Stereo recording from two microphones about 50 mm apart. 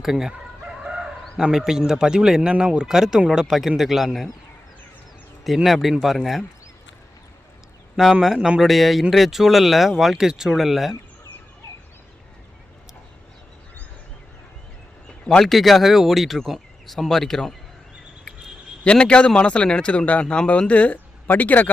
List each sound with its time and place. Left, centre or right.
0.0 s speech: centre
5.6 s speech: centre
8.2 s speech: centre
15.3 s a man's voice: centre
15.5 s speech: centre
18.9 s a man's voice: centre